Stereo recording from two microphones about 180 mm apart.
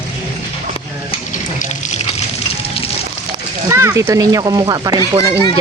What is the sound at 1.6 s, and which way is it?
Water, 40° left (ahead or behind).